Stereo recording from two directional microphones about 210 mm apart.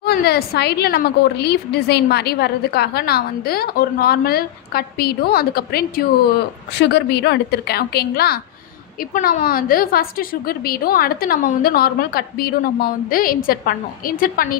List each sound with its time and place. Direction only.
0.0 s a woman's voice: 50° left (ahead or behind)